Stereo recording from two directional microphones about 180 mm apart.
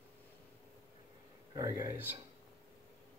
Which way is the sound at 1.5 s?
15° right (ahead or behind).